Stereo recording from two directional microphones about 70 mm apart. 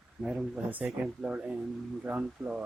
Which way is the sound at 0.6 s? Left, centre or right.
Right.